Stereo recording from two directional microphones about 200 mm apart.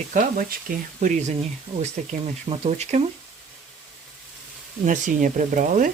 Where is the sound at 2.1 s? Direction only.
35° right (ahead or behind).